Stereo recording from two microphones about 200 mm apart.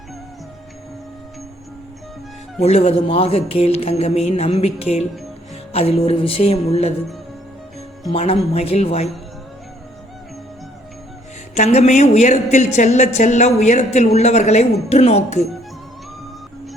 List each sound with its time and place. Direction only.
2.6 s a woman's voice: 30° left (ahead or behind)
5.7 s music: 30° left (ahead or behind)
8.1 s music: 30° left (ahead or behind)
11.5 s a woman's voice: 35° left (ahead or behind)